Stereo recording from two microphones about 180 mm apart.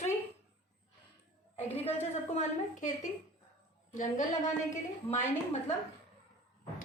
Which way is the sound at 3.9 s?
45° left (ahead or behind).